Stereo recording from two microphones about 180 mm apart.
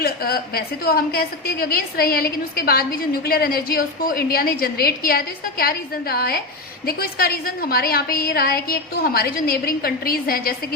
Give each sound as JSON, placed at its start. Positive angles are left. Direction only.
{"t": 0.0, "sound": "a woman's voice", "side_deg": 55}